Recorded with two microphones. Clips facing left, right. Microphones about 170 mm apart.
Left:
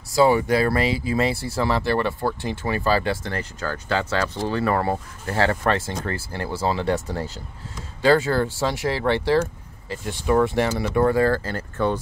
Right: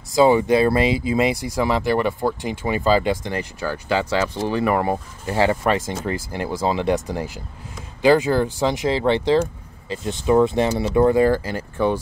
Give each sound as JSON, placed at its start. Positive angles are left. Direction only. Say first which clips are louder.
{"t": 0.1, "sound": "speech", "louder": "right 3 dB", "side_deg": -20}